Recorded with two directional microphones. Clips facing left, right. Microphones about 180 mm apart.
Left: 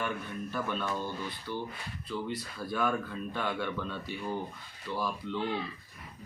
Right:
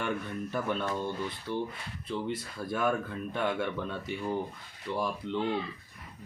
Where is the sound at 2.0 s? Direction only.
25° right (ahead or behind).